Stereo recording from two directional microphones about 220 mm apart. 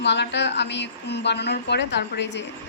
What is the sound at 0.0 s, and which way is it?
A woman's voice, 50° left (ahead or behind).